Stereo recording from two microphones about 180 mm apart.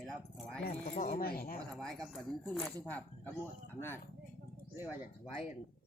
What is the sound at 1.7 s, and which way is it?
Speech, centre (ahead or behind).